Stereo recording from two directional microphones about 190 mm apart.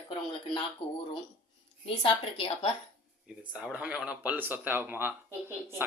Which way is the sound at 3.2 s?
5° right (ahead or behind).